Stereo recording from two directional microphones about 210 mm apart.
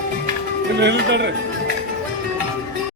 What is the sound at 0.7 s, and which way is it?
Speech, 55° right (ahead or behind).